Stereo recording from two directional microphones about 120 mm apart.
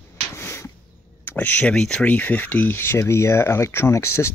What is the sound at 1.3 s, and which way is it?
Speech, 15° left (ahead or behind).